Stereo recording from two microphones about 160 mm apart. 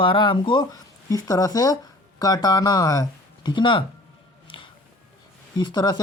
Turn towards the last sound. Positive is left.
turn(degrees=25)  # may be behind; listen again after turning